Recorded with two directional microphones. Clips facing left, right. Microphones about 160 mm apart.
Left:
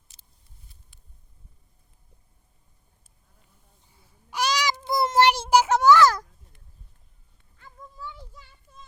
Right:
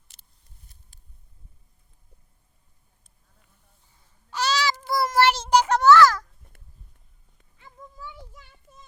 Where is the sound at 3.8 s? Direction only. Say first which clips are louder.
Right 1 dB; 10° left (ahead or behind).